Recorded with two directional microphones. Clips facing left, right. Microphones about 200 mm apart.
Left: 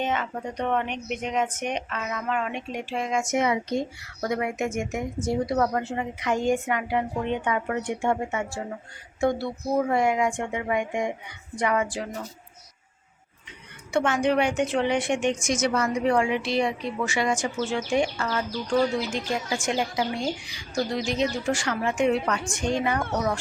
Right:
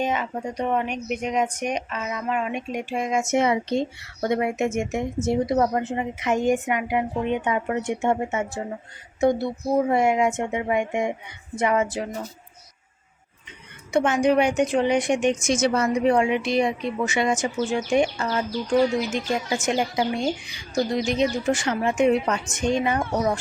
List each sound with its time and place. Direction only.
0.0 s a woman's voice: 10° right (ahead or behind)
13.9 s a woman's voice: 20° right (ahead or behind)